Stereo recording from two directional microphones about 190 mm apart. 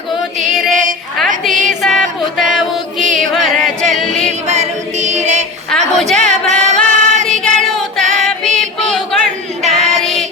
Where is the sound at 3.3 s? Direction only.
Centre (ahead or behind).